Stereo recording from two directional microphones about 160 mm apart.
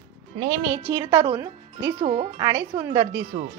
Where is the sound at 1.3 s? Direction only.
20° right (ahead or behind).